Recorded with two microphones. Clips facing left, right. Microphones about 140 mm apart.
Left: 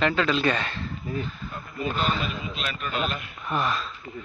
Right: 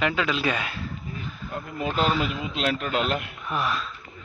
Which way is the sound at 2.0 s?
90° right.